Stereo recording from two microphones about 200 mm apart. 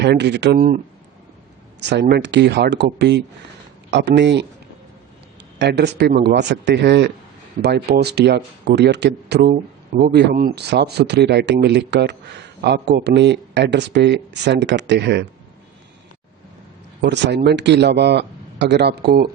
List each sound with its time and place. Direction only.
0.0 s speech: 60° right (ahead or behind)
1.8 s speech: 60° right (ahead or behind)
5.5 s speech: 55° right (ahead or behind)
17.0 s speech: 60° right (ahead or behind)